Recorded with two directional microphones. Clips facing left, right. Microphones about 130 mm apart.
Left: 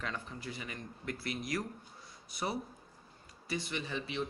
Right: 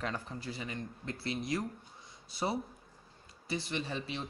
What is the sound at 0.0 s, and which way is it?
Speech, 35° right (ahead or behind).